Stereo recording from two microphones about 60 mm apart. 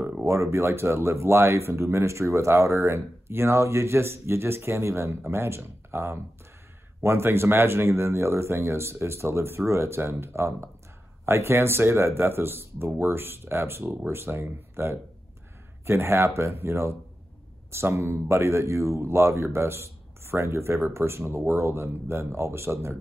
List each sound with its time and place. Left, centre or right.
0.2 s speech: right